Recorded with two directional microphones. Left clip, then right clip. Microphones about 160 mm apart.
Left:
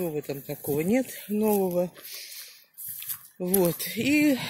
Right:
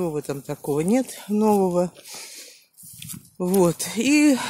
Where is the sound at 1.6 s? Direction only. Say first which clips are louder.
Right 5 dB; 45° right (ahead or behind).